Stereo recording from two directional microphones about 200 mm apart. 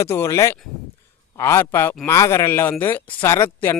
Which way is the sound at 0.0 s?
15° left (ahead or behind).